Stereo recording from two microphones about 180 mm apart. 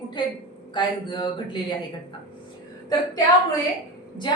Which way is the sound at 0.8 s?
25° left (ahead or behind).